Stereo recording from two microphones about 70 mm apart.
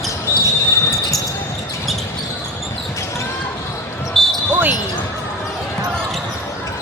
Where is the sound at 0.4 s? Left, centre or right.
Left.